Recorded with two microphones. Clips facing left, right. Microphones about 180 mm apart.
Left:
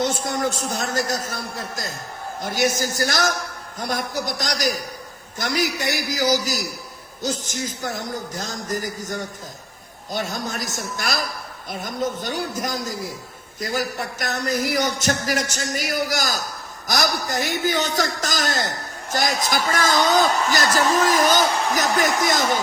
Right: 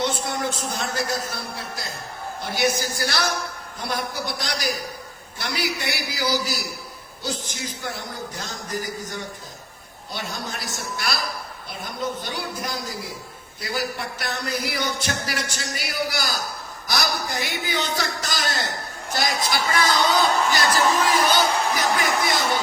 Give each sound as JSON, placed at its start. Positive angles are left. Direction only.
{"t": 0.0, "sound": "a man's voice", "side_deg": 45}